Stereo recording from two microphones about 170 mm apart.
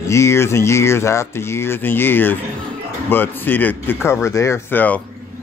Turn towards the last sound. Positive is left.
turn(degrees=10)  # may be behind; listen again after turning